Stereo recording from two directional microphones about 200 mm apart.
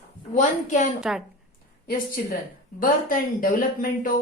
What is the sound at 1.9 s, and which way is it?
A woman's voice, 45° left (ahead or behind).